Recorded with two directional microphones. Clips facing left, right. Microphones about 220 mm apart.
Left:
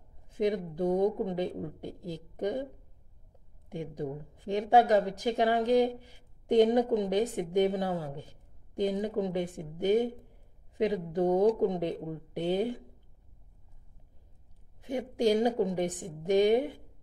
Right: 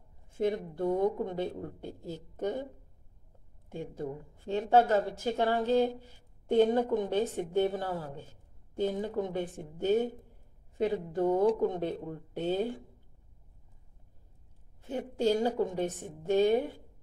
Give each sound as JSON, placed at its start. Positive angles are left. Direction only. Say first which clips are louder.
{"t": 0.3, "sound": "speech", "louder": "left 1 dB", "side_deg": 15}
{"t": 3.7, "sound": "speech", "louder": "left 2 dB", "side_deg": 15}
{"t": 14.8, "sound": "speech", "louder": "left 2 dB", "side_deg": 15}